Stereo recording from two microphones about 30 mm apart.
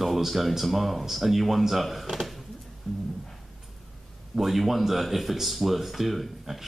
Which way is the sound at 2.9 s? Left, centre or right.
Centre.